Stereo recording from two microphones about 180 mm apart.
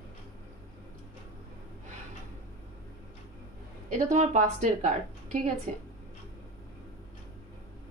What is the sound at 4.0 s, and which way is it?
Speech, 40° right (ahead or behind).